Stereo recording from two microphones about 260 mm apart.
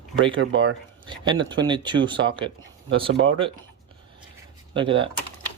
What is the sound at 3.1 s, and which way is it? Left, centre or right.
Speech, right.